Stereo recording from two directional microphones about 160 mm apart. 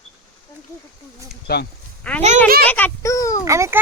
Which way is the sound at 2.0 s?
5° left (ahead or behind).